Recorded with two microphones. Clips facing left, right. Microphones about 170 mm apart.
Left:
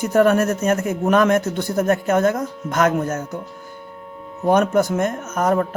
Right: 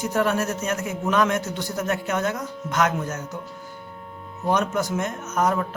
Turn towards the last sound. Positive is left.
turn(degrees=50)  # may be behind; listen again after turning